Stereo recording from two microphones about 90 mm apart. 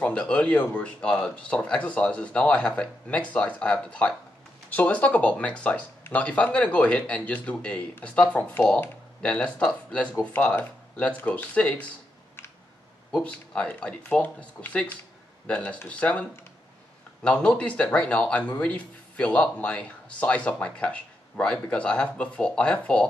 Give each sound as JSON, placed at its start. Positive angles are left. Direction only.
{"t": 0.0, "sound": "speech", "side_deg": 15}
{"t": 13.2, "sound": "speech", "side_deg": 15}